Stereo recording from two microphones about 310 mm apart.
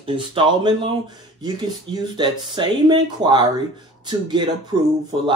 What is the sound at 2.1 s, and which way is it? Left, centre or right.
Speech, centre.